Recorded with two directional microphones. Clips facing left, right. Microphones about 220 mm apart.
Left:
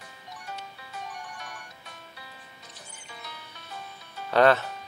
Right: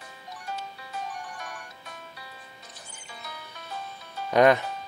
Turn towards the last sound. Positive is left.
turn(degrees=-15)  # may be behind; listen again after turning